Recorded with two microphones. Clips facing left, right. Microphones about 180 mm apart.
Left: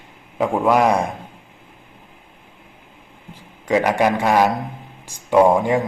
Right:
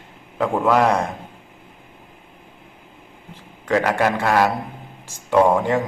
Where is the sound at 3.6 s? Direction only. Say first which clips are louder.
Left 2 dB; 15° left (ahead or behind).